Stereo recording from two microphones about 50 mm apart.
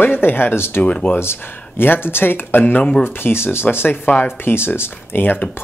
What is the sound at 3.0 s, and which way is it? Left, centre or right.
Speech, left.